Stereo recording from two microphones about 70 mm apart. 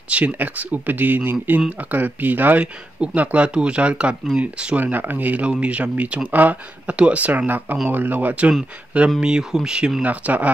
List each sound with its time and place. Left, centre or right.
0.1 s speech: right
9.2 s speech: centre
10.0 s speech: right